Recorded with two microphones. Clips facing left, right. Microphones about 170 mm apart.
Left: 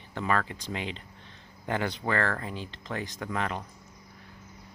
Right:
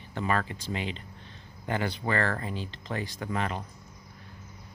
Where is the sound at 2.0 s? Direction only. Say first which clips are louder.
Right 1 dB; 15° right (ahead or behind).